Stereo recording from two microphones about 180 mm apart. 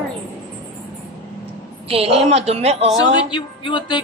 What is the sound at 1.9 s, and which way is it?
A woman's voice, 35° right (ahead or behind).